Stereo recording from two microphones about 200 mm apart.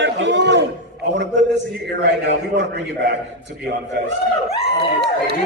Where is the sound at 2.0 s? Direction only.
60° right (ahead or behind).